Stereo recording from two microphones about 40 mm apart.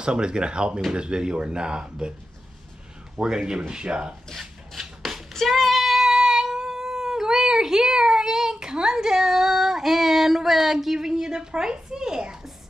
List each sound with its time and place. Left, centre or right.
0.0 s speech: right
3.2 s speech: centre
4.4 s a sound: centre
5.5 s child singing: centre